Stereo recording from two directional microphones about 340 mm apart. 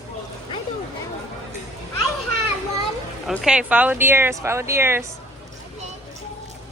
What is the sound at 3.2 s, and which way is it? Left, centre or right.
Speech, centre.